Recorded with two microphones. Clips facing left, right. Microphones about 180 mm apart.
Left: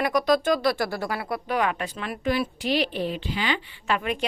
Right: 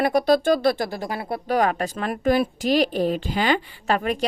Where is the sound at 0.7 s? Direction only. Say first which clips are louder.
Even; 20° right (ahead or behind).